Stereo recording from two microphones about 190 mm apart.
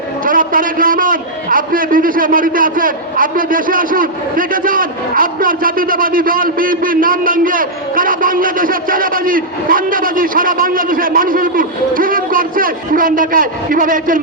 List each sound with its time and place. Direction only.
0.3 s a man's voice: 45° right (ahead or behind)